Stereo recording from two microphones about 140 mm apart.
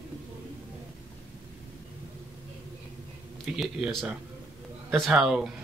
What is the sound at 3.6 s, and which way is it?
Speech, centre (ahead or behind).